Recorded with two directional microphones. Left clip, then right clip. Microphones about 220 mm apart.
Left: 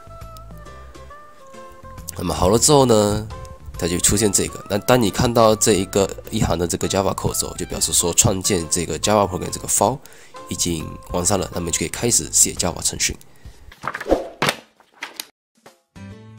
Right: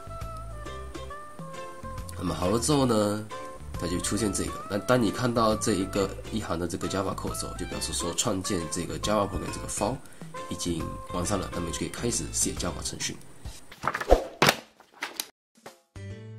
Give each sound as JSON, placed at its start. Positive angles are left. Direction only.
{"t": 0.2, "sound": "music", "side_deg": 0}
{"t": 2.0, "sound": "speech", "side_deg": 45}
{"t": 13.8, "sound": "a sound", "side_deg": 0}